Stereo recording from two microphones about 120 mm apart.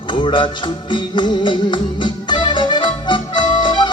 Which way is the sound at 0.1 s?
40° left (ahead or behind).